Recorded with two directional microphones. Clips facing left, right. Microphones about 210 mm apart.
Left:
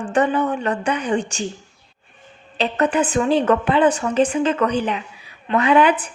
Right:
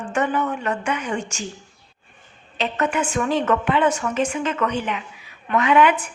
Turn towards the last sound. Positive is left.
turn(degrees=35)  # may be behind; listen again after turning